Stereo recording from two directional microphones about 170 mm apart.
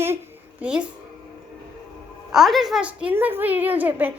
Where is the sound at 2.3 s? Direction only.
Centre (ahead or behind).